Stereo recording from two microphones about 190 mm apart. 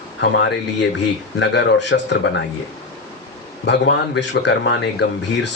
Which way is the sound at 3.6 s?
65° left (ahead or behind).